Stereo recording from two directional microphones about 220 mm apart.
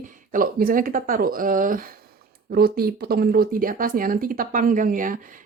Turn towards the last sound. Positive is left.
turn(degrees=-40)  # may be behind; listen again after turning